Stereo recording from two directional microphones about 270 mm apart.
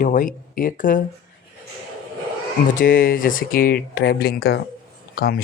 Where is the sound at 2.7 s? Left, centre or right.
Left.